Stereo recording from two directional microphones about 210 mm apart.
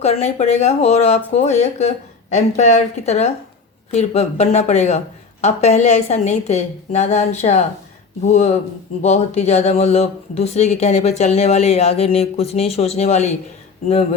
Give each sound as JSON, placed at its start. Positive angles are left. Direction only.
{"t": 0.0, "sound": "speech", "side_deg": 30}